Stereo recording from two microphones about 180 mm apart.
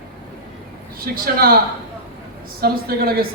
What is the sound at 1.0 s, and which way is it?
Speech, 55° right (ahead or behind).